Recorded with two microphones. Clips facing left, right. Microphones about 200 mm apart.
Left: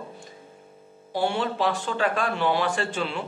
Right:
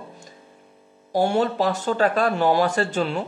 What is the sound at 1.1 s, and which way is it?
A man's voice, 45° right (ahead or behind).